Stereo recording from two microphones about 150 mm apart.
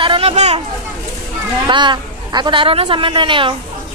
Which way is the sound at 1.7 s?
30° right (ahead or behind).